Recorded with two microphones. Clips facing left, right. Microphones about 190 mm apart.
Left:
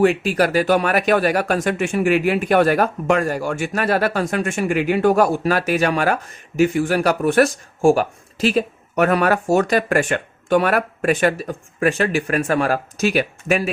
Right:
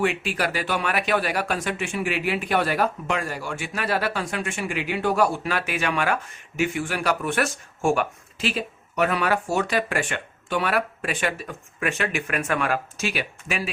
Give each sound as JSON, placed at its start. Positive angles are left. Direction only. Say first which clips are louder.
{"t": 0.0, "sound": "speech", "louder": "left 8 dB", "side_deg": 40}